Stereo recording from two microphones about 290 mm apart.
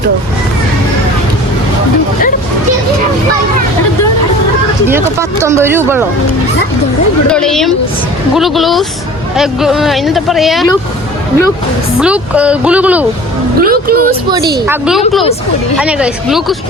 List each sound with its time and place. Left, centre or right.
4.9 s speech: centre
7.3 s speech: centre
11.9 s speech: centre
13.6 s a woman's voice: right
14.7 s speech: centre